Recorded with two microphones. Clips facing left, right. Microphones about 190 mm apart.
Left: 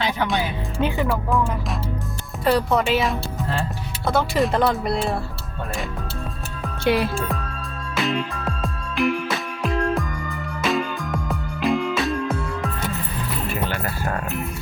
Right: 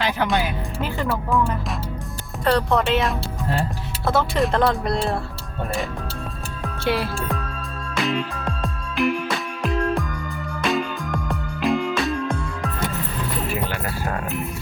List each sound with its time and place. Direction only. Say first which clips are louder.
0.0 s music: right 1 dB; centre (ahead or behind)
0.8 s music: left 6 dB; 20° left (ahead or behind)
1.0 s speech: even; 5° right (ahead or behind)
6.8 s music: left 3 dB; 15° left (ahead or behind)
7.9 s music: even; centre (ahead or behind)